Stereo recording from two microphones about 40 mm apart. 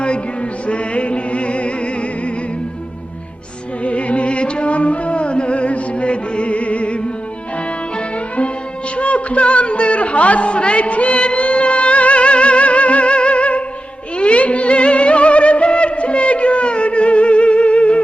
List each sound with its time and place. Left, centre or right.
0.7 s music: left
3.8 s music: left
9.0 s music: left